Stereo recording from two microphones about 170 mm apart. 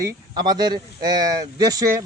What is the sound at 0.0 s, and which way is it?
A man's voice, 25° right (ahead or behind).